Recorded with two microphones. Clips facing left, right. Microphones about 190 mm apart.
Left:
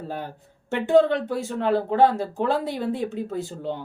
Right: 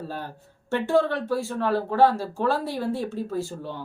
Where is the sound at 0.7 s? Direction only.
20° left (ahead or behind).